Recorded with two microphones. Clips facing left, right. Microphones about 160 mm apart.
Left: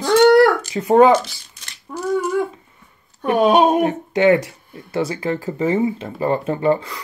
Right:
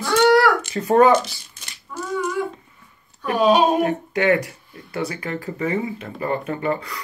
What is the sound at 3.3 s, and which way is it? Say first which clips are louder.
Speech: left 2 dB; 55° left (ahead or behind).